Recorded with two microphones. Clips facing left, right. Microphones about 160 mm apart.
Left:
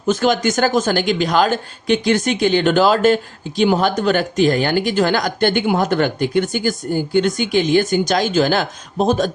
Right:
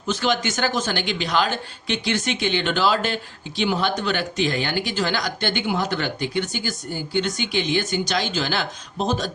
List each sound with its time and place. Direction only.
0.1 s speech: 45° left (ahead or behind)